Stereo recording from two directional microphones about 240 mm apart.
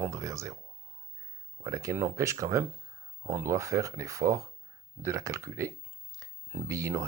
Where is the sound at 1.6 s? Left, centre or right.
Centre.